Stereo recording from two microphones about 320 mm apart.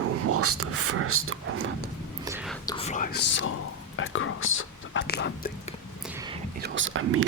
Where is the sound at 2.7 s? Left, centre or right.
Centre.